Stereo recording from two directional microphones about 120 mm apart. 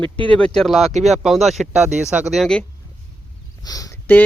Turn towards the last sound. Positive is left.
turn(degrees=30)  # may be behind; listen again after turning